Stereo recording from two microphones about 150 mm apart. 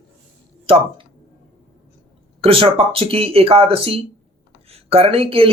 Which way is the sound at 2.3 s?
40° right (ahead or behind).